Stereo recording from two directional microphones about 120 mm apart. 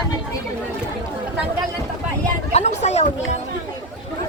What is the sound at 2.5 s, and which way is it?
Speech, 65° left (ahead or behind).